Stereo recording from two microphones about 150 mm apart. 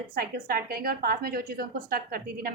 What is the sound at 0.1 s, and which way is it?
A woman's voice, 75° right (ahead or behind).